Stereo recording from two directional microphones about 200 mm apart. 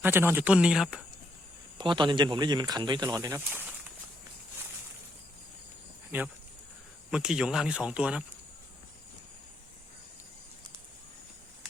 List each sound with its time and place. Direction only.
0.0 s speech: 10° right (ahead or behind)
1.8 s speech: 25° right (ahead or behind)
6.1 s speech: 10° right (ahead or behind)